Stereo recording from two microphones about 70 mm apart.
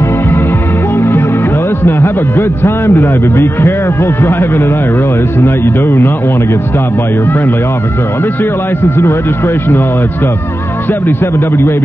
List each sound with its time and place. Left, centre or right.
0.9 s music: left
1.8 s a man's voice: left
10.9 s a man's voice: left